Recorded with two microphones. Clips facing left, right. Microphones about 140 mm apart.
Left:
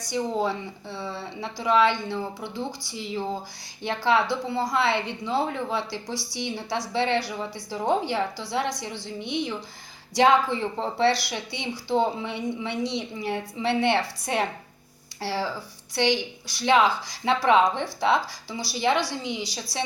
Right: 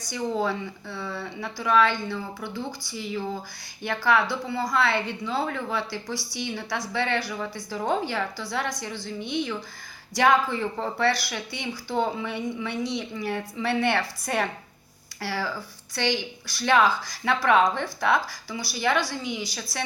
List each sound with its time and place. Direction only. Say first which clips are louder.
0.1 s a woman's voice: left 1 dB; 20° left (ahead or behind)